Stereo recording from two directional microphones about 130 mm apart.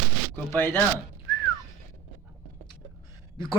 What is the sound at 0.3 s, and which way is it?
Speech, 15° left (ahead or behind).